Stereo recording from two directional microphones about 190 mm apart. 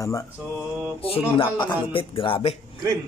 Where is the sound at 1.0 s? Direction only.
30° left (ahead or behind).